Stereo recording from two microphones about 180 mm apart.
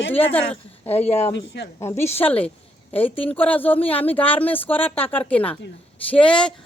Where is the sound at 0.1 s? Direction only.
10° left (ahead or behind).